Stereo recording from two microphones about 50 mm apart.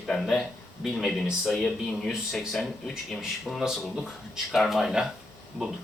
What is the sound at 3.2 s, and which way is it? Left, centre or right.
Speech, centre.